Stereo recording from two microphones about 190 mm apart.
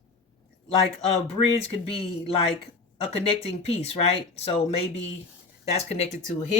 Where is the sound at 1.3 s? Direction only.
30° left (ahead or behind).